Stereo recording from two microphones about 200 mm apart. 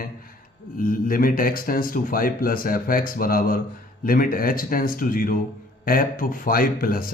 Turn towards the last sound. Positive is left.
turn(degrees=45)  # may be behind; listen again after turning